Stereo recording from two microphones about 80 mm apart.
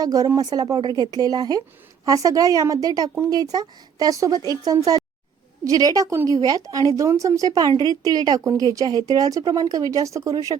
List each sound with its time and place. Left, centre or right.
0.0 s speech: right